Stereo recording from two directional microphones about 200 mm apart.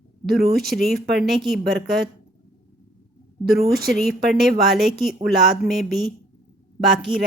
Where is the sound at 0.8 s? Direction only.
Centre (ahead or behind).